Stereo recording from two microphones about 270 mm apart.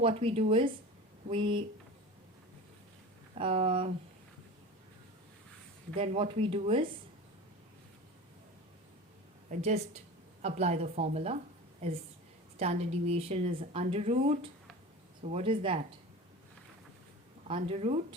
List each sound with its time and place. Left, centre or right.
0.0 s a woman's voice: right
3.3 s a woman's voice: right
6.0 s a woman's voice: right
9.5 s a woman's voice: right
12.5 s a woman's voice: right
17.5 s a woman's voice: right